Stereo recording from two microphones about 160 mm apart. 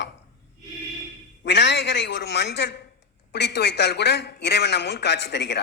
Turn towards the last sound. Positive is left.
turn(degrees=90)